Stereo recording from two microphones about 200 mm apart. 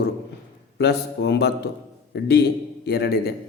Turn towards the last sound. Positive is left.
turn(degrees=55)  # may be behind; listen again after turning